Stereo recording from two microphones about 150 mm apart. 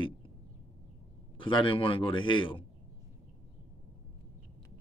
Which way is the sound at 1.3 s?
35° left (ahead or behind).